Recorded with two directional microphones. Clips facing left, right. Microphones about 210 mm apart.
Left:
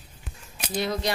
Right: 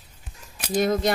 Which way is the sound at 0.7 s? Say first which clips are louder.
Right 6 dB; 50° right (ahead or behind).